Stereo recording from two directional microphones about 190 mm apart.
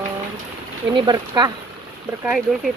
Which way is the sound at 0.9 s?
20° right (ahead or behind).